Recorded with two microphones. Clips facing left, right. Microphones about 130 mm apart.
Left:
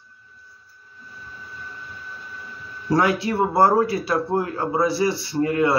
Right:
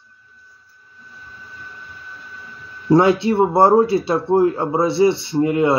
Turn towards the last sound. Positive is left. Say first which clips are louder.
# right 3 dB
turn(degrees=-20)  # may be behind; listen again after turning